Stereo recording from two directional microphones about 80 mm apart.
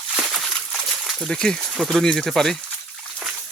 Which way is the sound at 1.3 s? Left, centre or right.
Centre.